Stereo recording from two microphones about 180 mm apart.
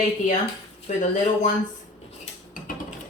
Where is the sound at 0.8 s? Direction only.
45° left (ahead or behind).